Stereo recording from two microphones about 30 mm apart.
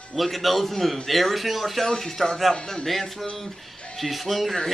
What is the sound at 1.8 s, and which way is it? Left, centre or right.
Speech, centre.